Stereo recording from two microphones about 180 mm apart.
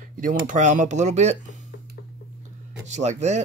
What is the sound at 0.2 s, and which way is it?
Speech, 45° right (ahead or behind).